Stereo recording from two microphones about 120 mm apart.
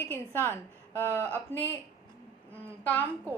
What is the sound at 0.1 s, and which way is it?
A woman's voice, 15° left (ahead or behind).